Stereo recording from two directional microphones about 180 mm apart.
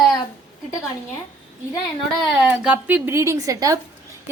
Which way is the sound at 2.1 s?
5° right (ahead or behind).